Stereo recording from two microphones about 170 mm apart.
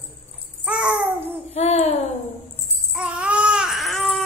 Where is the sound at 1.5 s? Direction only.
40° left (ahead or behind).